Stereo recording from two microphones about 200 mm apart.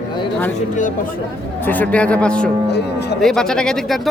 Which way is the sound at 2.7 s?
55° left (ahead or behind).